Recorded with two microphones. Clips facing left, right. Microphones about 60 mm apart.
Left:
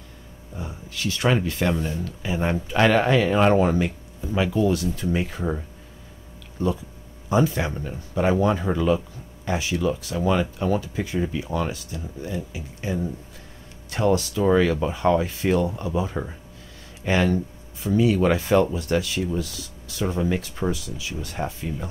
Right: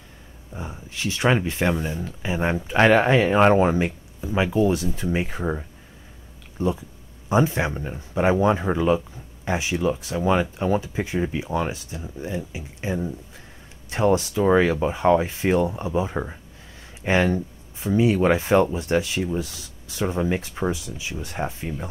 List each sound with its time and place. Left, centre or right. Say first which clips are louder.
0.6 s speech: even; right